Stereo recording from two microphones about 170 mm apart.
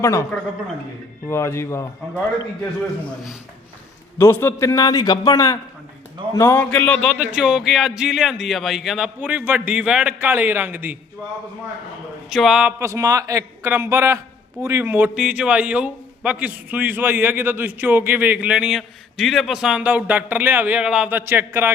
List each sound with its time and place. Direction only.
0.0 s a man's voice: 15° left (ahead or behind)
1.3 s a man's voice: 15° left (ahead or behind)
4.2 s a man's voice: 15° left (ahead or behind)
7.2 s speech: 5° right (ahead or behind)
12.3 s speech: centre (ahead or behind)
12.8 s a man's voice: 20° right (ahead or behind)